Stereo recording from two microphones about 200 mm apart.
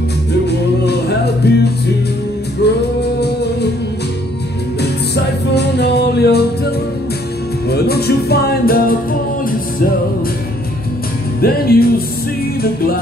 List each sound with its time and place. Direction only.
0.5 s music: 55° left (ahead or behind)
2.6 s music: 55° left (ahead or behind)
5.1 s music: 55° left (ahead or behind)
7.7 s music: 50° left (ahead or behind)
11.4 s music: 50° left (ahead or behind)